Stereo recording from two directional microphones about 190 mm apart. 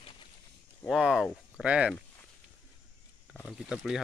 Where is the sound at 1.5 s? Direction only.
5° right (ahead or behind).